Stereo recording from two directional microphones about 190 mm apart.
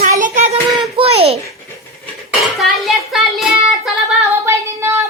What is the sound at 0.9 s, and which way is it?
Speech, 30° right (ahead or behind).